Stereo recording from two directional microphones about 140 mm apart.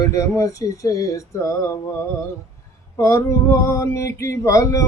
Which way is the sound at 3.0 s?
20° left (ahead or behind).